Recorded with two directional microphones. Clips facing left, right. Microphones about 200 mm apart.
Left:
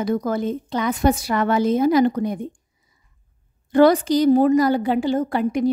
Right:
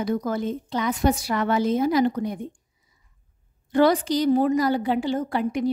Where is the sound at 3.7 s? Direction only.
50° left (ahead or behind).